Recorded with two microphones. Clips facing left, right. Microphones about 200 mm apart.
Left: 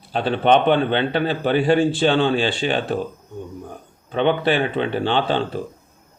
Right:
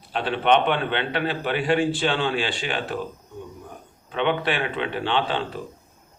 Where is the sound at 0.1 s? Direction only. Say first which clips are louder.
Left 4 dB; 35° left (ahead or behind).